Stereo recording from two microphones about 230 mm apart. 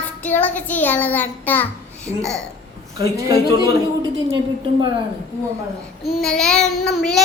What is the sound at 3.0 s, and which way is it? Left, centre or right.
Speech, centre.